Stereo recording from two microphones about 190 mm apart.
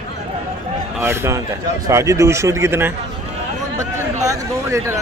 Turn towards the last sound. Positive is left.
turn(degrees=-15)  # may be behind; listen again after turning